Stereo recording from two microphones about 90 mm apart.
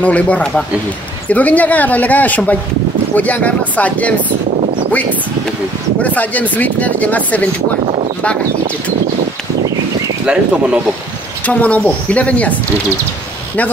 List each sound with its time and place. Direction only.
0.0 s speech: 15° left (ahead or behind)
6.0 s speech: 15° left (ahead or behind)
10.2 s speech: 10° right (ahead or behind)
11.4 s speech: 15° left (ahead or behind)